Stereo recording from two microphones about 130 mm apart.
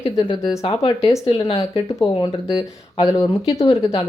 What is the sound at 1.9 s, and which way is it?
Speech, 30° left (ahead or behind).